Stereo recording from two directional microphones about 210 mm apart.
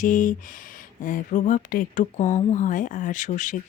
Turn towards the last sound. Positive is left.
turn(degrees=35)  # may be behind; listen again after turning